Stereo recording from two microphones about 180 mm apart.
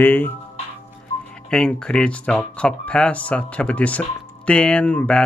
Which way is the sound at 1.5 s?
5° left (ahead or behind).